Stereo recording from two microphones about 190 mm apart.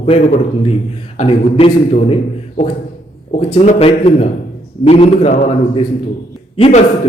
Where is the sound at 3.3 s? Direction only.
35° left (ahead or behind).